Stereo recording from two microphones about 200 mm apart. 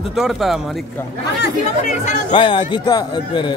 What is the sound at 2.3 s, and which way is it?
A man's voice, 25° left (ahead or behind).